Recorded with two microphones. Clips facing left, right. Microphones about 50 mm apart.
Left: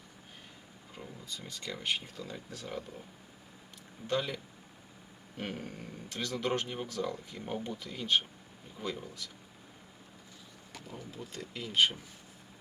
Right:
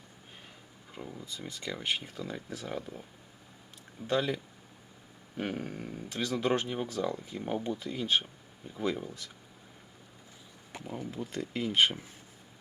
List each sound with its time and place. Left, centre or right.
0.9 s speech: centre
4.0 s speech: centre
5.4 s speech: centre
10.7 s speech: right